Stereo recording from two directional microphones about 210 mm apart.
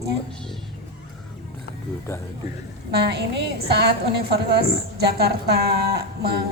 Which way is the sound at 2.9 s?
50° right (ahead or behind).